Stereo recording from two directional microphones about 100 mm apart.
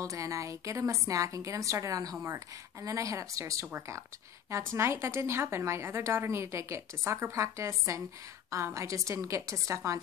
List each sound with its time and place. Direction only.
0.0 s a woman's voice: 30° right (ahead or behind)